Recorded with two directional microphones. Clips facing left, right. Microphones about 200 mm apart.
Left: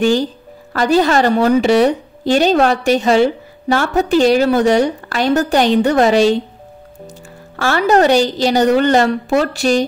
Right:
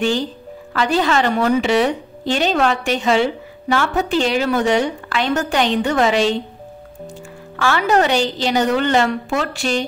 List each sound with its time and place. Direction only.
0.0 s a woman's voice: 40° left (ahead or behind)
7.5 s a woman's voice: 40° left (ahead or behind)